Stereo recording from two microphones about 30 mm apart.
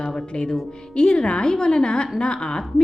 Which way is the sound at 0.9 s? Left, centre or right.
Left.